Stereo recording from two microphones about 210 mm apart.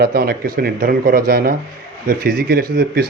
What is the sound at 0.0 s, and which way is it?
Speech, 45° right (ahead or behind).